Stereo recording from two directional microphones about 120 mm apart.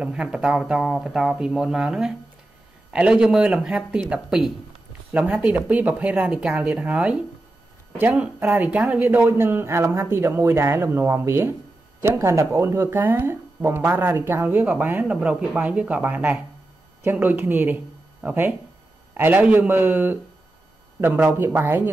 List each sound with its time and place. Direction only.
0.0 s speech: 10° right (ahead or behind)